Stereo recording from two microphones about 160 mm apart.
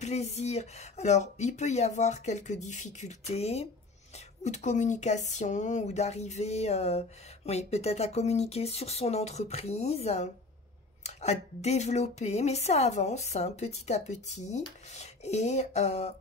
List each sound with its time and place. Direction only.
0.0 s speech: 45° left (ahead or behind)